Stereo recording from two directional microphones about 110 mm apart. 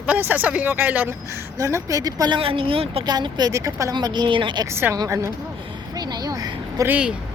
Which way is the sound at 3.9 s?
40° right (ahead or behind).